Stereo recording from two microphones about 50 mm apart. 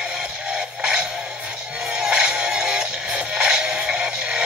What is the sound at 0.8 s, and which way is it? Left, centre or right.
Music, centre.